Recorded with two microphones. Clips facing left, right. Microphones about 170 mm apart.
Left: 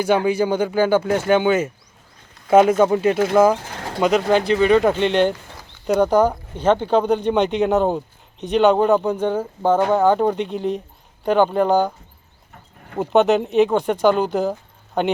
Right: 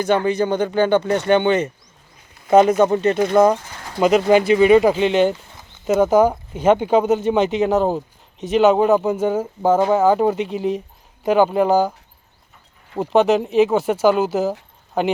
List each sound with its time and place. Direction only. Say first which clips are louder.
0.0 s speech: even; 10° left (ahead or behind)
2.8 s speech: even; 10° left (ahead or behind)
3.6 s pigeon: left 6 dB; 60° left (ahead or behind)
4.0 s speech: right 3 dB; 5° right (ahead or behind)
13.0 s speech: even; centre (ahead or behind)